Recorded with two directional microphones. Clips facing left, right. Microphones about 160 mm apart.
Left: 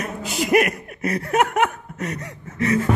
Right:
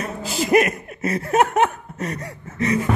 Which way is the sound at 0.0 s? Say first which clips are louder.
Right 1 dB; 30° right (ahead or behind).